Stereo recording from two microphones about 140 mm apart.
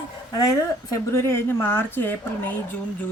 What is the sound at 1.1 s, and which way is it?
Speech, 20° left (ahead or behind).